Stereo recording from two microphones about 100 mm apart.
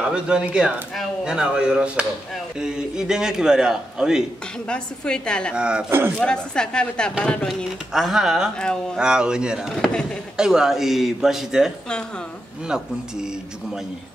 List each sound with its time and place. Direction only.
0.1 s a man's voice: 10° right (ahead or behind)
4.6 s speech: 10° left (ahead or behind)
5.5 s a man's voice: 10° right (ahead or behind)
5.9 s speech: 25° right (ahead or behind)
6.1 s speech: 10° left (ahead or behind)
7.9 s a man's voice: 5° right (ahead or behind)